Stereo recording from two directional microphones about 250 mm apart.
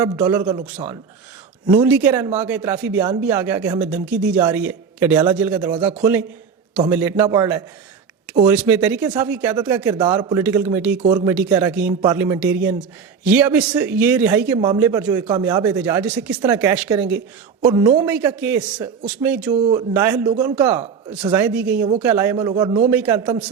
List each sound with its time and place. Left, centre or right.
0.0 s speech: centre
1.8 s speech: centre
22.9 s a man's voice: centre